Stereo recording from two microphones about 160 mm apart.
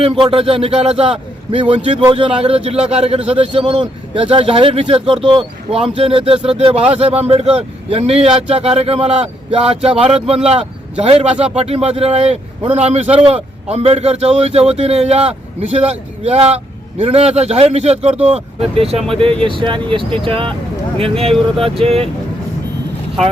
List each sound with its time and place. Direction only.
0.0 s speech: 35° right (ahead or behind)
3.2 s a man's voice: 10° right (ahead or behind)
3.5 s speech: 30° right (ahead or behind)